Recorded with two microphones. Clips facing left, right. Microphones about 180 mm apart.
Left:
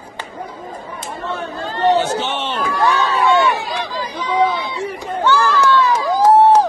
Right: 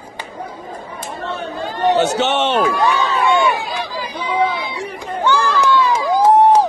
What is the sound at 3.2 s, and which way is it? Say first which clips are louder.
Run: left 1 dB; 15° right (ahead or behind).